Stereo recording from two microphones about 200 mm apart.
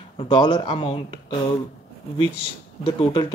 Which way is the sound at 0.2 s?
20° left (ahead or behind).